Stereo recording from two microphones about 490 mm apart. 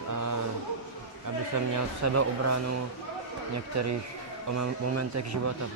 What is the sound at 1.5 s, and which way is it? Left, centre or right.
Speech, right.